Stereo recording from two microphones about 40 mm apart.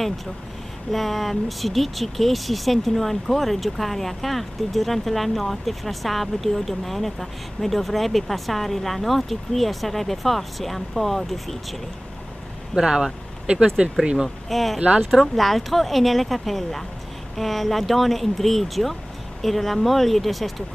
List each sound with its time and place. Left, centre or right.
0.9 s speech: centre
12.8 s speech: centre
14.5 s speech: centre
14.8 s speech: right
15.0 s speech: centre